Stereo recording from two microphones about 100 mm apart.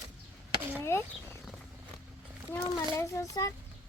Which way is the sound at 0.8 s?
25° left (ahead or behind).